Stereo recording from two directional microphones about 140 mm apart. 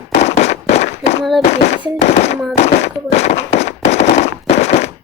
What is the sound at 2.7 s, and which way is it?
Fireworks, 50° left (ahead or behind).